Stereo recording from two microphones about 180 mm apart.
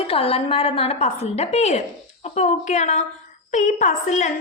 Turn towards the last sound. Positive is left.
turn(degrees=40)  # may be behind; listen again after turning